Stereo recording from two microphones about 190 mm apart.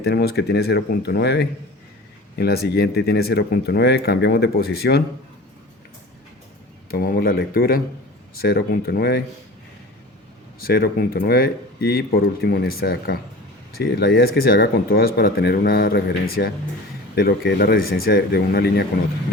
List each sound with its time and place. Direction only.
0.0 s speech: 60° left (ahead or behind)
6.9 s speech: 50° left (ahead or behind)
10.6 s speech: 55° left (ahead or behind)